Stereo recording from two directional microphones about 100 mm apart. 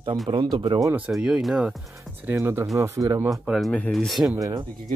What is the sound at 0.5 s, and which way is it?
Speech, 55° right (ahead or behind).